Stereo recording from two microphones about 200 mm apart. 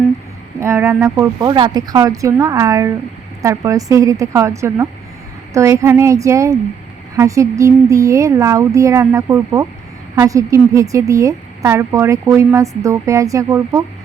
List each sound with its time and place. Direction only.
0.6 s a woman's voice: 15° right (ahead or behind)